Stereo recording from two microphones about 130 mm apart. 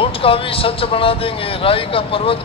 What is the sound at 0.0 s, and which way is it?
Speech, 45° left (ahead or behind).